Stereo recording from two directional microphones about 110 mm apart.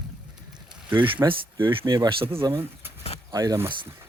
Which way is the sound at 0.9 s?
50° right (ahead or behind).